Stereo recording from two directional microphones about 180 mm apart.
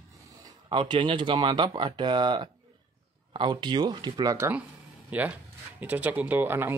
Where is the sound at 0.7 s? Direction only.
30° right (ahead or behind).